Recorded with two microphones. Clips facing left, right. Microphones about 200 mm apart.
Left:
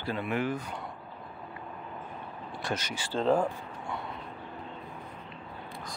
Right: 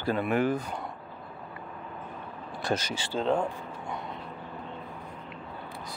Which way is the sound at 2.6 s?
35° right (ahead or behind).